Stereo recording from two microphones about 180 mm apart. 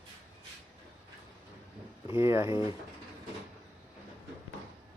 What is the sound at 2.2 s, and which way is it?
Speech, 15° right (ahead or behind).